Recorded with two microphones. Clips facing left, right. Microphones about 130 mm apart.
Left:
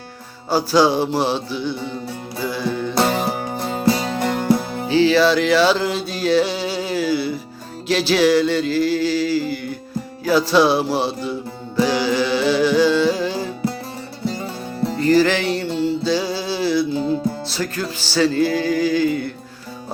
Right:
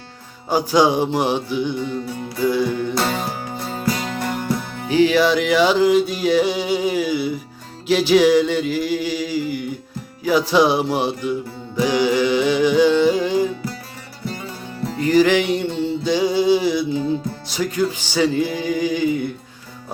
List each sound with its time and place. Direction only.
0.5 s music: 15° right (ahead or behind)
3.8 s music: 35° left (ahead or behind)
4.9 s music: 15° right (ahead or behind)
14.9 s music: 15° right (ahead or behind)